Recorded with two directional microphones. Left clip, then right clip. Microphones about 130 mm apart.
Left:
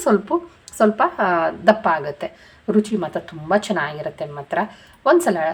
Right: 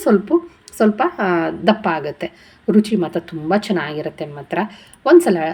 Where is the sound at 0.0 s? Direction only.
5° right (ahead or behind).